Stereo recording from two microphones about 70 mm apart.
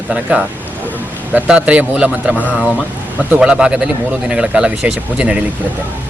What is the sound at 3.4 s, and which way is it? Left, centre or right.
A man's voice, centre.